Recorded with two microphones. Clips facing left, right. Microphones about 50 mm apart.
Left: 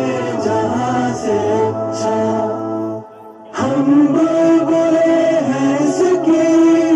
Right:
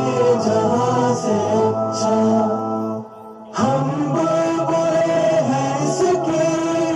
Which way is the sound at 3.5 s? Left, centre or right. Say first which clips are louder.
Left 7 dB; left.